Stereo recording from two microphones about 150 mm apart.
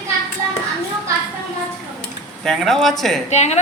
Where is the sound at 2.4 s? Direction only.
Centre (ahead or behind).